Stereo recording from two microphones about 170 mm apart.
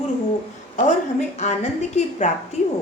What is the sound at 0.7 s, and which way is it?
A woman's voice, 45° left (ahead or behind).